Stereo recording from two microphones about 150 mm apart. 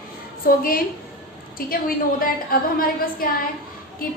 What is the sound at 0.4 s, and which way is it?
A woman's voice, 70° left (ahead or behind).